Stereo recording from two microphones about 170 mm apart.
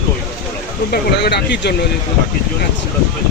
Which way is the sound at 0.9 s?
75° left (ahead or behind).